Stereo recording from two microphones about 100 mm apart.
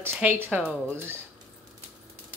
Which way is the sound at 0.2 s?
15° right (ahead or behind).